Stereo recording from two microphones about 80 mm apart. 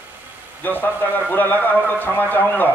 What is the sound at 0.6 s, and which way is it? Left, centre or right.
A man's voice, left.